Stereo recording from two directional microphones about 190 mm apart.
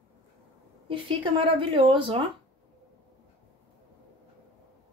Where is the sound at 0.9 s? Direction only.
25° right (ahead or behind).